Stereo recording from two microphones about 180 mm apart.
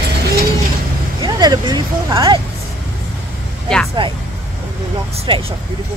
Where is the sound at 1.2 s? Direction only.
25° right (ahead or behind).